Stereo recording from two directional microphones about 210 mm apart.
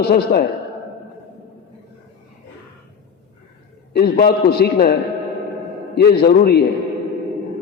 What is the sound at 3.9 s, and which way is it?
A man's voice, 50° left (ahead or behind).